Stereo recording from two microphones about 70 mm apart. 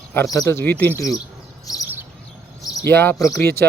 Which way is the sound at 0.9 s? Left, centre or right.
Left.